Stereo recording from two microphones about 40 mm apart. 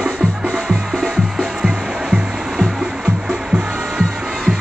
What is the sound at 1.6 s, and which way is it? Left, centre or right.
Music, centre.